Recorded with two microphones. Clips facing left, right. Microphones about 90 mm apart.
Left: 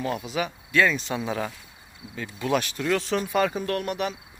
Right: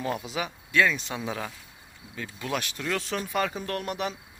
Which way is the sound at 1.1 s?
Centre (ahead or behind).